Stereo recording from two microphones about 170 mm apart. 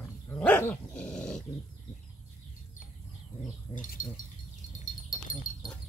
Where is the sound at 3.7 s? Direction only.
50° left (ahead or behind).